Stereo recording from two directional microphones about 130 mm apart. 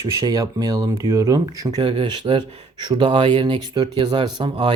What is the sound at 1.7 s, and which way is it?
Speech, 40° right (ahead or behind).